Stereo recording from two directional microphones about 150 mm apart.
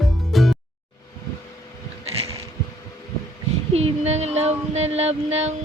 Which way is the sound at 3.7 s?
45° right (ahead or behind).